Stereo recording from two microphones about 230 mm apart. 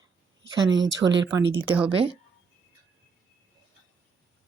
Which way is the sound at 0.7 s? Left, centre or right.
Right.